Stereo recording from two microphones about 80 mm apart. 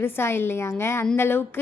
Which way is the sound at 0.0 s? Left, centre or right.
Left.